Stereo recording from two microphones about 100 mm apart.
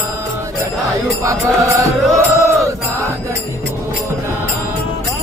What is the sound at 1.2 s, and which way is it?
Mantra, 30° right (ahead or behind).